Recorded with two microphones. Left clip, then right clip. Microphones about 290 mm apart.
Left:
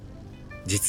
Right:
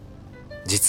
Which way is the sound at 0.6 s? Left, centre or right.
Centre.